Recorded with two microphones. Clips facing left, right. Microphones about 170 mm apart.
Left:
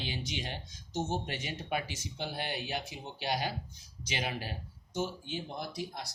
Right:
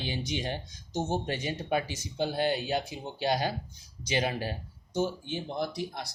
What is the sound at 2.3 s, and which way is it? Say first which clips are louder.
Speech: right 10 dB; 15° left (ahead or behind).